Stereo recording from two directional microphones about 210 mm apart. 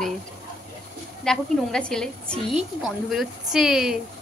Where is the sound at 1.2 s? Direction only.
5° left (ahead or behind).